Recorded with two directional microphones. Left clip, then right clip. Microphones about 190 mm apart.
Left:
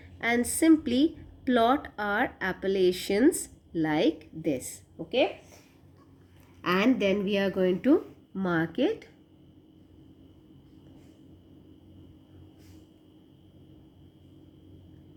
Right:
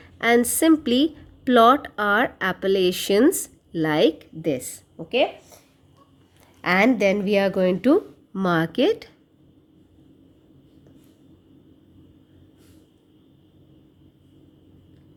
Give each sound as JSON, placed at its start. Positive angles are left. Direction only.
{"t": 0.0, "sound": "a woman's voice", "side_deg": -50}
{"t": 6.6, "sound": "a woman's voice", "side_deg": -55}
{"t": 8.3, "sound": "a woman's voice", "side_deg": -45}